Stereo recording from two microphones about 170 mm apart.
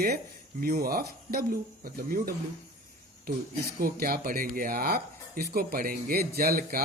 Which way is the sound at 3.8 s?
60° right (ahead or behind).